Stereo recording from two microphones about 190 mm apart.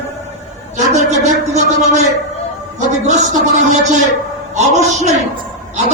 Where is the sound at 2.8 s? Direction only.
40° right (ahead or behind).